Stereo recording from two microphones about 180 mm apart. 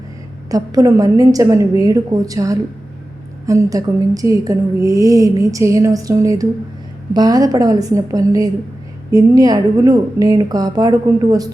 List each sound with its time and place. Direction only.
0.5 s a woman's voice: 20° right (ahead or behind)